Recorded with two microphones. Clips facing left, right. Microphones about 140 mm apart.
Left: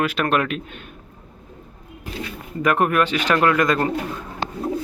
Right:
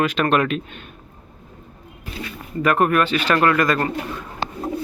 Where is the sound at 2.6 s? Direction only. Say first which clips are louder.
Right 1 dB; 15° left (ahead or behind).